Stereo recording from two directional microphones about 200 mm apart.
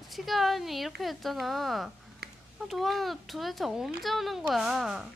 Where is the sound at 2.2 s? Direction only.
55° right (ahead or behind).